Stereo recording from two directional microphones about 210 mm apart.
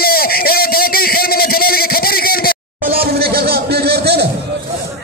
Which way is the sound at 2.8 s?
45° right (ahead or behind).